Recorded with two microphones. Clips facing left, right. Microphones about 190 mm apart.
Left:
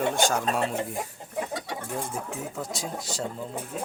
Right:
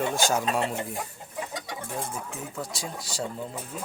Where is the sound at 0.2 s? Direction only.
5° right (ahead or behind).